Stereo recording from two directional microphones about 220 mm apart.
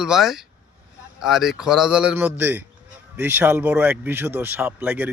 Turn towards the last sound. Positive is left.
turn(degrees=-10)  # may be behind; listen again after turning